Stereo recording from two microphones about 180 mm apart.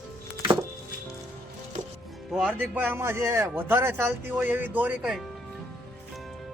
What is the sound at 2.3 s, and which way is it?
Speech, centre (ahead or behind).